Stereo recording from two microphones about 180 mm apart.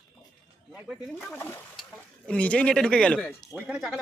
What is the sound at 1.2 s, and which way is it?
Speech, 10° left (ahead or behind).